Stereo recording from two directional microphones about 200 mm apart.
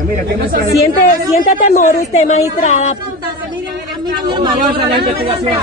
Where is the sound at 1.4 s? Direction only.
45° left (ahead or behind).